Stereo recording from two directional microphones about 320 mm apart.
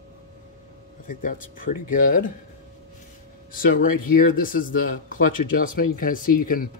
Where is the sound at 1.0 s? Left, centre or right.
Left.